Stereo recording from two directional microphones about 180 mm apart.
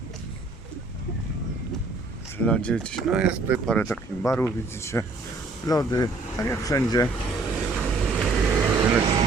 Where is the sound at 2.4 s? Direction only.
5° left (ahead or behind).